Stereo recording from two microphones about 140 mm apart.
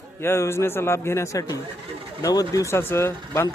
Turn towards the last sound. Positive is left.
turn(degrees=20)  # may be behind; listen again after turning